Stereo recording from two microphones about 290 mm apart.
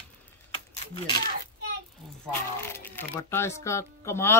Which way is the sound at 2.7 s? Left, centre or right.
Centre.